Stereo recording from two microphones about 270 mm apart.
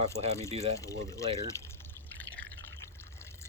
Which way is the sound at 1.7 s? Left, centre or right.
Centre.